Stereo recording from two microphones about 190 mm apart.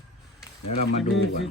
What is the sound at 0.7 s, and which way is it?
Speech, 35° left (ahead or behind).